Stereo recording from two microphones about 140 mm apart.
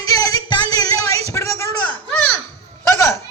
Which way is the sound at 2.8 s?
20° left (ahead or behind).